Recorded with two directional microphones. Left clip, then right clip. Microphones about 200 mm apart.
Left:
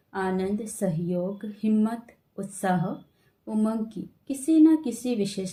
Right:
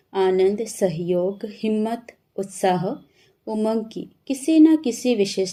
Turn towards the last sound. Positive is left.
turn(degrees=-25)  # may be behind; listen again after turning